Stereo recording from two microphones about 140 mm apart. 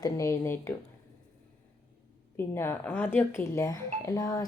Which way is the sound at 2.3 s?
15° left (ahead or behind).